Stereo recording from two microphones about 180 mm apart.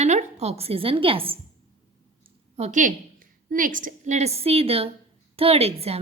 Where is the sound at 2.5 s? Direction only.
40° right (ahead or behind).